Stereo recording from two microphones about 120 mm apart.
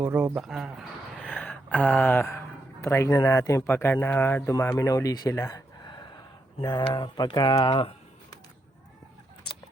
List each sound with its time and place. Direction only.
0.0 s speech: 15° right (ahead or behind)
0.3 s speech: 5° right (ahead or behind)
1.2 s gasp: 10° left (ahead or behind)
2.8 s speech: 25° left (ahead or behind); by 7.9 s 45° left (ahead or behind)